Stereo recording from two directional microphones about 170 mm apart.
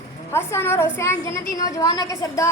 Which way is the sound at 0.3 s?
15° left (ahead or behind).